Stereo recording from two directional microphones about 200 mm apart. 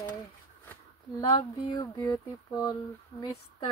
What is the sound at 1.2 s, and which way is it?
Speech, 20° left (ahead or behind).